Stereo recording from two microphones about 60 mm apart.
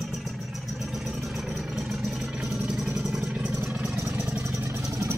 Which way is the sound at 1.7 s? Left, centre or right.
Centre.